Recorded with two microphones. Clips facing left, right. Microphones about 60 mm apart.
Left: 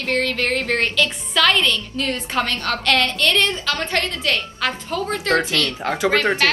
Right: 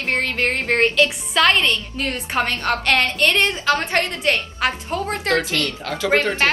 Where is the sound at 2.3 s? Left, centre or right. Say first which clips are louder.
Right 3 dB; right.